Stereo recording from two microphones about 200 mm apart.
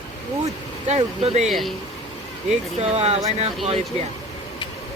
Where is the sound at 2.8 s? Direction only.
30° right (ahead or behind).